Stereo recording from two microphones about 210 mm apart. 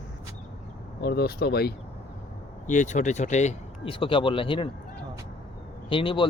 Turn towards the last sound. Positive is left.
turn(degrees=25)  # may be behind; listen again after turning